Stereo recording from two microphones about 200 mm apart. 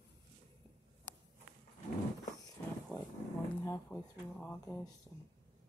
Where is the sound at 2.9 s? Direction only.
5° left (ahead or behind).